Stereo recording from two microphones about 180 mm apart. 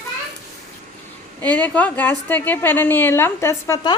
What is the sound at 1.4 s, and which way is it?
A woman's voice, 10° left (ahead or behind).